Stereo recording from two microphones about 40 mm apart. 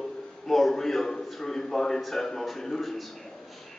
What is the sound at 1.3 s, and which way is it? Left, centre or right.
A man's voice, centre.